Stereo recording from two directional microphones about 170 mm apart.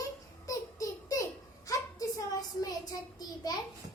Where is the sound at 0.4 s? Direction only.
20° left (ahead or behind).